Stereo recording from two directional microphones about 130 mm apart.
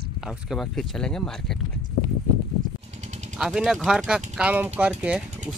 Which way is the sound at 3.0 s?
65° right (ahead or behind).